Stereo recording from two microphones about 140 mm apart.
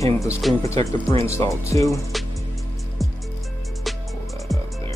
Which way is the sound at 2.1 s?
Centre (ahead or behind).